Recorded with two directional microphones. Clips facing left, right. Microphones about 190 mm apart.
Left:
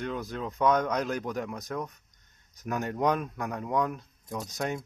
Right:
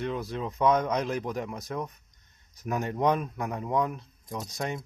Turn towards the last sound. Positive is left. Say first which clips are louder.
# left 1 dB
turn(degrees=0)  # may be behind; listen again after turning